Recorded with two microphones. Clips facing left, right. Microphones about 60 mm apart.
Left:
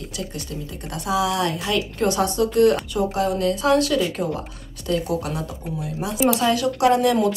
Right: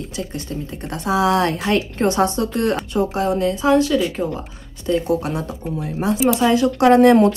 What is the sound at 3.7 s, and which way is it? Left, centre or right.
Speech, centre.